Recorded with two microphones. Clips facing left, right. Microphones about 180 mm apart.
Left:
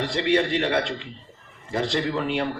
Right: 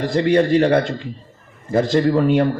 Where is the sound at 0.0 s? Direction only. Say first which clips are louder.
Right 6 dB; 45° right (ahead or behind).